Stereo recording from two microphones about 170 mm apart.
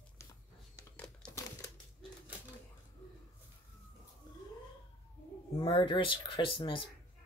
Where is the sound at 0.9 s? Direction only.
5° left (ahead or behind).